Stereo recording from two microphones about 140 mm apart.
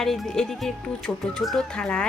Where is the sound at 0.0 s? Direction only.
Centre (ahead or behind).